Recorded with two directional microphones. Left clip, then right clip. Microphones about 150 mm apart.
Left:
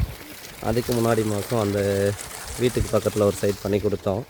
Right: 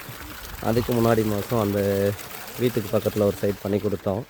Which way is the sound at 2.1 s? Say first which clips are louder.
Left 1 dB; 90° right.